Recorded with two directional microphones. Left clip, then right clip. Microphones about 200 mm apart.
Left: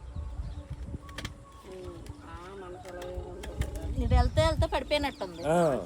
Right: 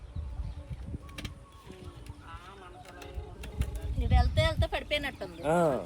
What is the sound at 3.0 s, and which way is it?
Music, 35° left (ahead or behind).